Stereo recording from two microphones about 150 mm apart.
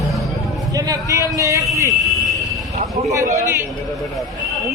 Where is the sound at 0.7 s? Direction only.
20° right (ahead or behind).